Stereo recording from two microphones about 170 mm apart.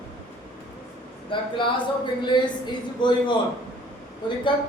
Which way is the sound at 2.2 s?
25° left (ahead or behind).